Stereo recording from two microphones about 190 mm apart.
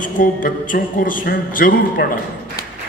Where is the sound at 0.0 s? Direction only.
45° left (ahead or behind).